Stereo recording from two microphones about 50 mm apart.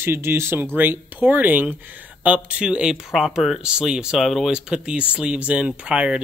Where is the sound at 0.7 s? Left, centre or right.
Right.